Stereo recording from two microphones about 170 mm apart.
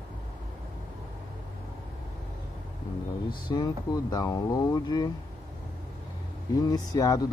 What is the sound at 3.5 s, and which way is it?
Speech, 25° left (ahead or behind).